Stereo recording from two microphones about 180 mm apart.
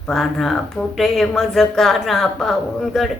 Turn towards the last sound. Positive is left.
turn(degrees=0)  # may be behind; listen again after turning